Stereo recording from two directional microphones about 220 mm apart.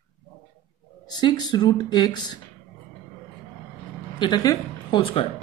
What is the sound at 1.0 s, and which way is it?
A woman's voice, 20° left (ahead or behind).